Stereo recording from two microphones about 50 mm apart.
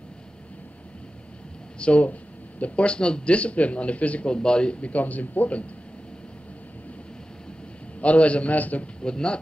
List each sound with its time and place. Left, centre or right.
1.8 s a man's voice: left
4.9 s speech: left
8.0 s a man's voice: left
9.0 s speech: centre